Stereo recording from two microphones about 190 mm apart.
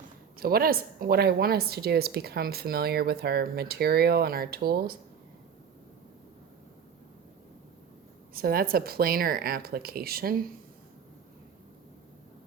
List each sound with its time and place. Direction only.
0.3 s a woman's voice: 50° right (ahead or behind)
8.3 s speech: 50° right (ahead or behind)